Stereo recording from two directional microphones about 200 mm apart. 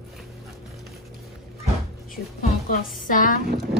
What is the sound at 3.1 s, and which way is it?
Speech, 40° left (ahead or behind).